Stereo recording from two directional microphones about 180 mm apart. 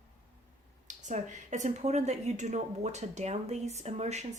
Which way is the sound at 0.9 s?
45° right (ahead or behind).